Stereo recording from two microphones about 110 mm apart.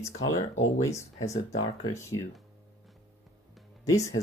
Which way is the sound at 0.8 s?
30° left (ahead or behind).